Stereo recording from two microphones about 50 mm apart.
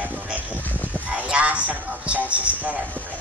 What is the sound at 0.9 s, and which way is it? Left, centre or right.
Music, right.